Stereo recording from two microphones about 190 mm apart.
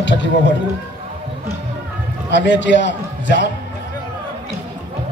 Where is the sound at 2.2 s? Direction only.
70° left (ahead or behind).